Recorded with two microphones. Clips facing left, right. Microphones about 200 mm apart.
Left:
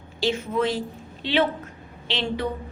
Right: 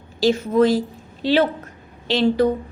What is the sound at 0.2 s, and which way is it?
A woman's voice, 40° right (ahead or behind).